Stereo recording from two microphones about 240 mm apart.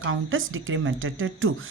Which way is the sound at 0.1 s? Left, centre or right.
Right.